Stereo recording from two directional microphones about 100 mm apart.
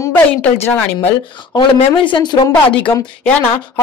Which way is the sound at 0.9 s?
50° left (ahead or behind).